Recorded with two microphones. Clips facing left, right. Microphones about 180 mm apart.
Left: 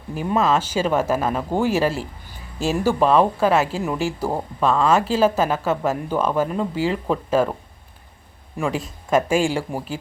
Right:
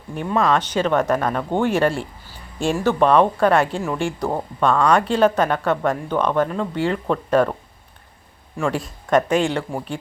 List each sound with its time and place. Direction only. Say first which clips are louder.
0.1 s speech: even; 5° left (ahead or behind)
8.6 s speech: right 1 dB; 5° left (ahead or behind)